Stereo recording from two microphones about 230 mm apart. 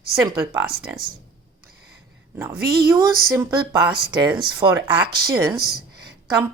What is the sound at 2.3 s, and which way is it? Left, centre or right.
Speech, centre.